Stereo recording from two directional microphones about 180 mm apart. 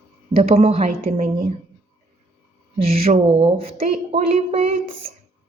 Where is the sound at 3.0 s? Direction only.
35° right (ahead or behind).